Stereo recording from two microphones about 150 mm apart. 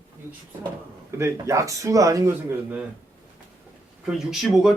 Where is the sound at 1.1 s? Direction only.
20° right (ahead or behind).